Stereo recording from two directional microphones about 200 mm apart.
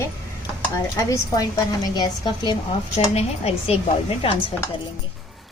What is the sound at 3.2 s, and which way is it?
Speech, 30° left (ahead or behind).